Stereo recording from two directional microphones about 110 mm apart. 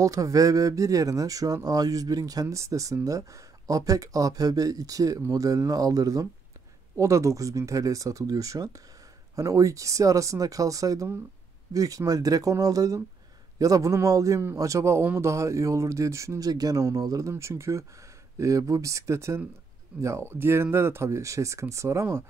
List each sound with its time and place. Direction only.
0.0 s speech: 30° right (ahead or behind)